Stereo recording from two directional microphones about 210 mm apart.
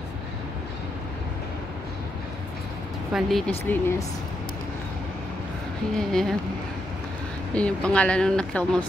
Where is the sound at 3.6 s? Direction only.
15° left (ahead or behind).